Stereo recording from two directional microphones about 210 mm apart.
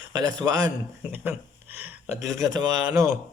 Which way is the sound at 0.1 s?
20° right (ahead or behind).